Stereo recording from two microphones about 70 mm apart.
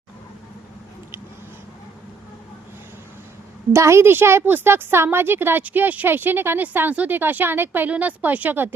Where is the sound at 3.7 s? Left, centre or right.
Right.